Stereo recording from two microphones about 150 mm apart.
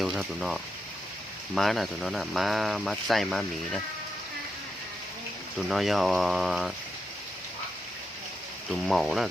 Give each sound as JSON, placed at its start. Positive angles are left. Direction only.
{"t": 0.0, "sound": "speech", "side_deg": 0}
{"t": 5.5, "sound": "speech", "side_deg": 0}
{"t": 8.9, "sound": "speech", "side_deg": 0}